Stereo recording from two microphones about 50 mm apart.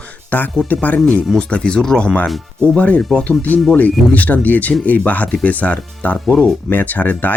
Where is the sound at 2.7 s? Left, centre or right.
Left.